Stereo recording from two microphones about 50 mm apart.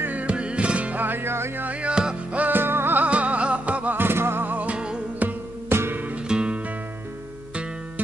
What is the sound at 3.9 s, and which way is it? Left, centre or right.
Music, right.